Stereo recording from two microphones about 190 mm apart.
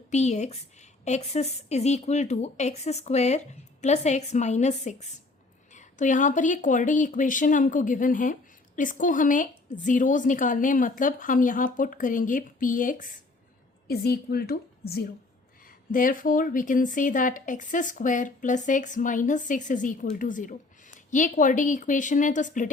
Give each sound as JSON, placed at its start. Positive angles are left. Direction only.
{"t": 0.1, "sound": "a woman's voice", "side_deg": 35}